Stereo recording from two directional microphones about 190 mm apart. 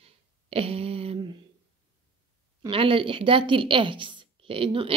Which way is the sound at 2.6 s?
30° right (ahead or behind).